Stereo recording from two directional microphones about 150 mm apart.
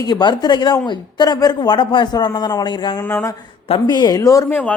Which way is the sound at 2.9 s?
10° left (ahead or behind).